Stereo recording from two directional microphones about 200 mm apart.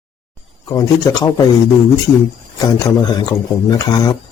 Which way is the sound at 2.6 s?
15° left (ahead or behind).